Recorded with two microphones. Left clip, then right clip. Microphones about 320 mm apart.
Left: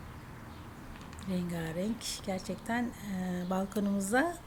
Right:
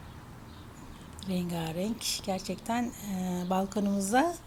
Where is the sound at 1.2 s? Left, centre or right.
Centre.